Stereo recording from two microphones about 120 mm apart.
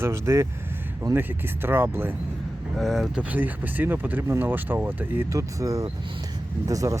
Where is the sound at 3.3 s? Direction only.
15° right (ahead or behind).